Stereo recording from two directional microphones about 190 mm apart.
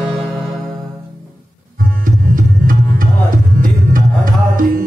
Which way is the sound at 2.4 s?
45° right (ahead or behind).